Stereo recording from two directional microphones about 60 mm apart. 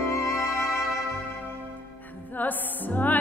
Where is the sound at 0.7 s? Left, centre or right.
Centre.